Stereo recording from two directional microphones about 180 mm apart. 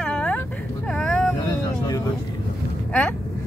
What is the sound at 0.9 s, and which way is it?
Vehicle, 5° left (ahead or behind).